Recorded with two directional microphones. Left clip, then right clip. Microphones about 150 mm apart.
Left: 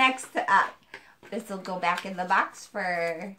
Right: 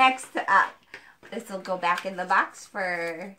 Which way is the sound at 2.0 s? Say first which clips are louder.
Right 1 dB; 15° left (ahead or behind).